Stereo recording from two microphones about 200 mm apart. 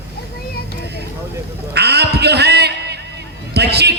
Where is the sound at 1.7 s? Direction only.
55° right (ahead or behind).